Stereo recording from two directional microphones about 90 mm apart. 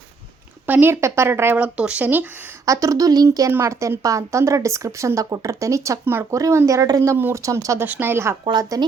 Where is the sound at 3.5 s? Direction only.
30° right (ahead or behind).